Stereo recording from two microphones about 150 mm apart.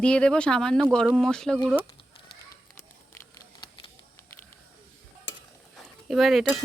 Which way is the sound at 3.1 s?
20° left (ahead or behind).